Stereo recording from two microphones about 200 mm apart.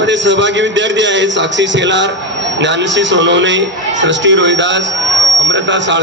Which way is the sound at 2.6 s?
65° right (ahead or behind).